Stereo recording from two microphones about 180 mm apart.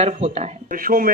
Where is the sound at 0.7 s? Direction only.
50° right (ahead or behind).